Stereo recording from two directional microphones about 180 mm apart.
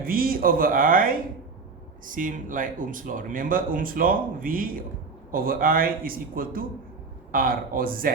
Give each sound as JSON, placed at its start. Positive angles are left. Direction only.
{"t": 0.0, "sound": "speech", "side_deg": -55}